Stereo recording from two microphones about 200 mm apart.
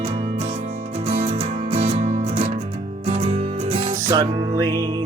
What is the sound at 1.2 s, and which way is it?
Music, 30° right (ahead or behind).